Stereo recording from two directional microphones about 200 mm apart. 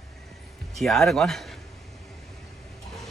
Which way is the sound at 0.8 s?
Centre (ahead or behind).